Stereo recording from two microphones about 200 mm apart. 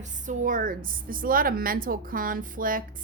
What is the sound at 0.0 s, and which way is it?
A woman's voice, 40° right (ahead or behind).